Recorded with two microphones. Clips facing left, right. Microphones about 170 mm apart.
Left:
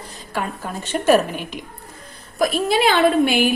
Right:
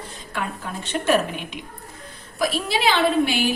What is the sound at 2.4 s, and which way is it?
A woman's voice, 50° left (ahead or behind).